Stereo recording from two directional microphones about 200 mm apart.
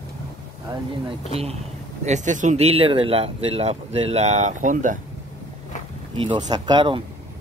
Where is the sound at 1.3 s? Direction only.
30° right (ahead or behind).